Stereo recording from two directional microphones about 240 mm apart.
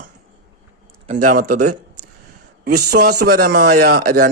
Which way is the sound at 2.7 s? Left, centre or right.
Right.